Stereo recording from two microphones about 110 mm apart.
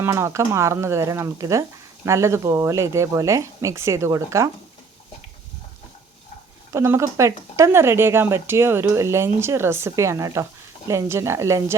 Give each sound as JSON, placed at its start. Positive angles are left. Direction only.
{"t": 0.0, "sound": "speech", "side_deg": -25}
{"t": 6.7, "sound": "speech", "side_deg": -25}